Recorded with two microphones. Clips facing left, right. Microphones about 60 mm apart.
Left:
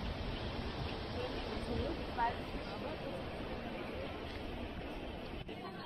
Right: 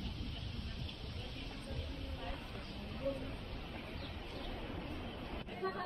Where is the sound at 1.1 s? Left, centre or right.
Left.